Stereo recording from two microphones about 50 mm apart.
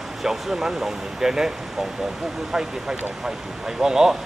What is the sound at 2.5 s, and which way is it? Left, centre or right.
Speech, centre.